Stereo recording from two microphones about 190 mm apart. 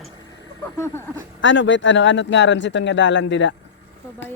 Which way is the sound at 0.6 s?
10° left (ahead or behind).